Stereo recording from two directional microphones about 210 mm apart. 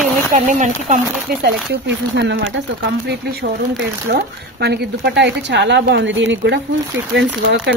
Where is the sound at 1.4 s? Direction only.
50° right (ahead or behind).